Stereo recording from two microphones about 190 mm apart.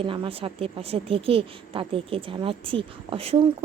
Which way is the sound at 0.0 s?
30° right (ahead or behind).